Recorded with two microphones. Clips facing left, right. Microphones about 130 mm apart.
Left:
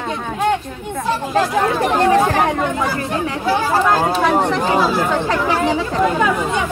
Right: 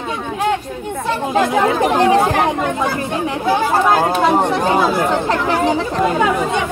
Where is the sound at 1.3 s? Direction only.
15° right (ahead or behind).